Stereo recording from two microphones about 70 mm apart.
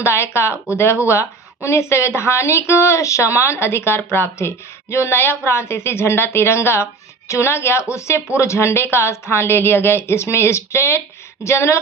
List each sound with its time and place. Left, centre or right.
0.0 s speech: left